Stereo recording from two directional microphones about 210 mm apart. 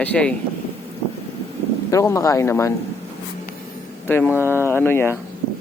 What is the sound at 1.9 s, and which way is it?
Speech, 15° left (ahead or behind).